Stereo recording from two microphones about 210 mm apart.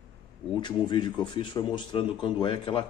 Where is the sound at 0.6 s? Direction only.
20° left (ahead or behind).